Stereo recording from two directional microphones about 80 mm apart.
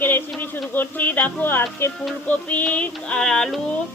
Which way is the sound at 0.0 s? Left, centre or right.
Left.